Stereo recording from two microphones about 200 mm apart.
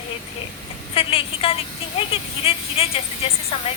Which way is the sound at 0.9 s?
25° left (ahead or behind).